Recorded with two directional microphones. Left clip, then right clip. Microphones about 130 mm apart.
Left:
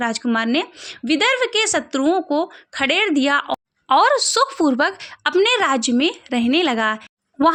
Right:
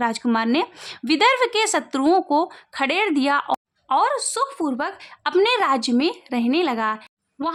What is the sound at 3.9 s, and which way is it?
A woman's voice, 30° left (ahead or behind).